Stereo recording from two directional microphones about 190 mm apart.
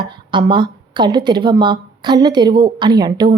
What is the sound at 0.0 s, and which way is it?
A woman's voice, 25° right (ahead or behind).